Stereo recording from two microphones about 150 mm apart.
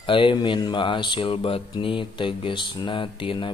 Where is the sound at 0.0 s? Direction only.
35° left (ahead or behind).